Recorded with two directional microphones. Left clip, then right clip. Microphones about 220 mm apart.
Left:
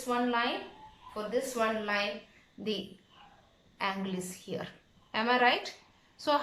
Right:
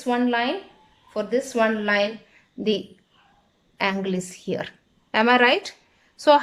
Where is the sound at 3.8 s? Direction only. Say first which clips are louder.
Right 10 dB; 45° right (ahead or behind).